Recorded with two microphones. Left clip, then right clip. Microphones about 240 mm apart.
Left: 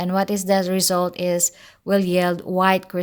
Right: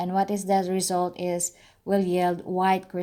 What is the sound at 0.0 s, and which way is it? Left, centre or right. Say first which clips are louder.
Speech: left 3 dB; left.